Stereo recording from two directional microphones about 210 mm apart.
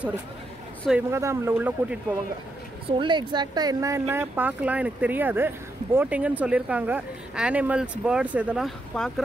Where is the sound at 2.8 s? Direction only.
20° right (ahead or behind).